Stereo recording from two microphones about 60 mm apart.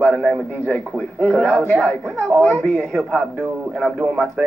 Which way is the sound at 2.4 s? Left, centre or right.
Centre.